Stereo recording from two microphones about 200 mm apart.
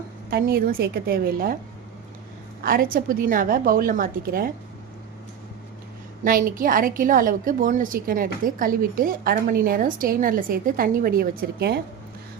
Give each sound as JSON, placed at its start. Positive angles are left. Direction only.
{"t": 0.3, "sound": "a woman's voice", "side_deg": -50}
{"t": 2.6, "sound": "a woman's voice", "side_deg": -45}
{"t": 6.2, "sound": "a woman's voice", "side_deg": -45}